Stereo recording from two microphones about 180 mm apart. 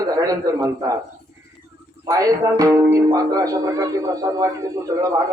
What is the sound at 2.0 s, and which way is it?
Speech, 20° right (ahead or behind).